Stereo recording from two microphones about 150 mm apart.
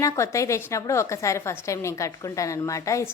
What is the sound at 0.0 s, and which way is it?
A woman's voice, 20° left (ahead or behind).